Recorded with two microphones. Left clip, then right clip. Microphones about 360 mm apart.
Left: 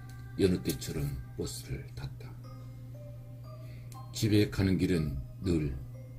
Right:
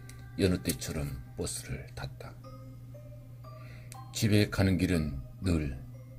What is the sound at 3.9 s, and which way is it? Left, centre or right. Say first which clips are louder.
Speech: even; right.